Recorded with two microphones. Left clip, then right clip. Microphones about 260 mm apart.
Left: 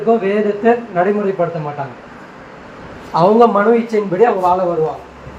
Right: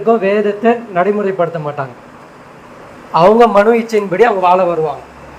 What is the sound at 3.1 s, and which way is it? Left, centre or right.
Speech, right.